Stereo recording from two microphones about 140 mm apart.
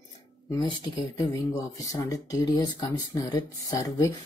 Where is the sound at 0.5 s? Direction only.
30° left (ahead or behind).